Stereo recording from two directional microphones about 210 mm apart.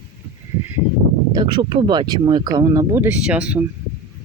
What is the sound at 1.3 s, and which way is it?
Speech, 20° right (ahead or behind).